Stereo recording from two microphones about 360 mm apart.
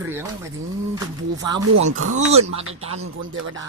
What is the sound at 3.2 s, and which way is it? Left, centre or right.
Speech, right.